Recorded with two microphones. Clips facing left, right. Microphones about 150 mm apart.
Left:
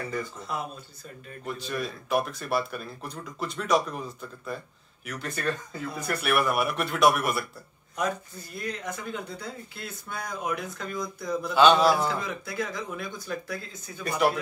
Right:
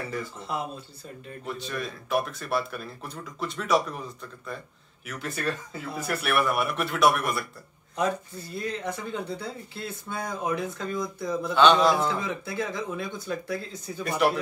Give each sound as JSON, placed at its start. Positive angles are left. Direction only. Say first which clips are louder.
{"t": 1.4, "sound": "speech", "louder": "left 1 dB", "side_deg": 0}
{"t": 8.5, "sound": "speech", "louder": "right 3 dB", "side_deg": -30}
{"t": 11.5, "sound": "speech", "louder": "even", "side_deg": 5}
{"t": 12.0, "sound": "speech", "louder": "right 1 dB", "side_deg": -25}
{"t": 14.0, "sound": "speech", "louder": "right 1 dB", "side_deg": 0}